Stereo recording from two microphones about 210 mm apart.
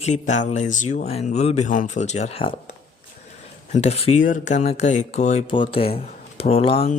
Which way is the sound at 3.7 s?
30° left (ahead or behind).